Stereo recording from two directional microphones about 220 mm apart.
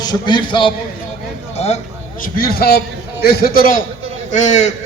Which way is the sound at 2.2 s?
45° left (ahead or behind).